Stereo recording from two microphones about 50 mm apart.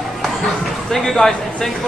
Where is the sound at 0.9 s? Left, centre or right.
Centre.